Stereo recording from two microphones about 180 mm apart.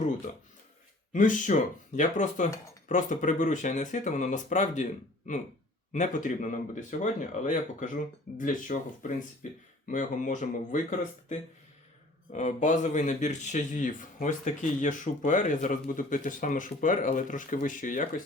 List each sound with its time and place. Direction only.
1.1 s speech: 45° left (ahead or behind)
12.3 s speech: 40° left (ahead or behind)